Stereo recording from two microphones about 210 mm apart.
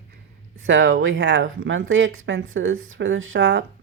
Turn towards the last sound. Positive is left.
turn(degrees=-65)  # may be behind; listen again after turning